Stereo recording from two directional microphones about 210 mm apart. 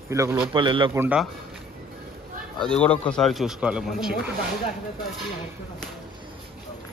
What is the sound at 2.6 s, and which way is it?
Speech, 5° left (ahead or behind).